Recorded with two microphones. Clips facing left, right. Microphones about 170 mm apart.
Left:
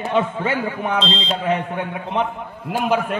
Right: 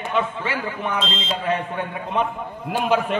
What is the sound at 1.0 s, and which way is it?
Speech, 20° left (ahead or behind).